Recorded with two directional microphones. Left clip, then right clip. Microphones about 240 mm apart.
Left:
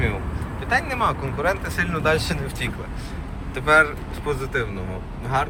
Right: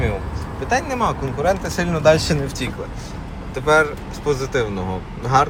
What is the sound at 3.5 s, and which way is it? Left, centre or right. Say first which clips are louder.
Speech: right 1 dB; centre.